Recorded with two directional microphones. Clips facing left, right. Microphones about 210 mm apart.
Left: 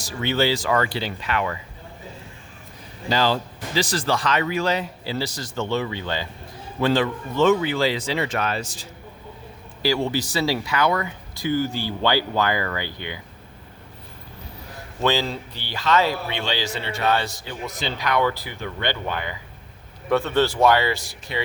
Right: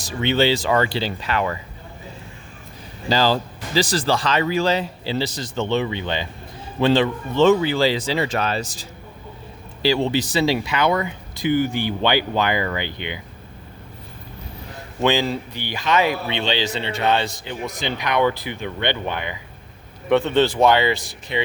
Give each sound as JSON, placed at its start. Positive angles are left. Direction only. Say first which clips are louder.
{"t": 0.1, "sound": "speech", "louder": "right 3 dB", "side_deg": -20}
{"t": 3.1, "sound": "speech", "louder": "right 2 dB", "side_deg": -35}
{"t": 9.8, "sound": "speech", "louder": "right 3 dB", "side_deg": -25}
{"t": 15.0, "sound": "speech", "louder": "right 3 dB", "side_deg": -15}